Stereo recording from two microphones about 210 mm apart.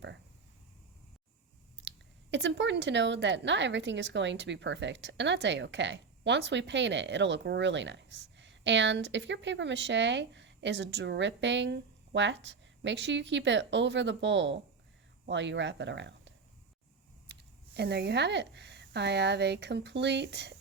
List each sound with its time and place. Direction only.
2.3 s speech: 55° right (ahead or behind)
17.7 s speech: 55° right (ahead or behind)